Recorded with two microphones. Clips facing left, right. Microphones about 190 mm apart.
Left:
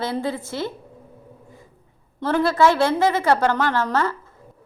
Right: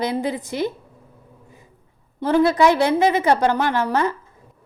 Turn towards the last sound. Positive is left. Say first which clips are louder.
# right 2 dB
turn(degrees=-15)  # may be behind; listen again after turning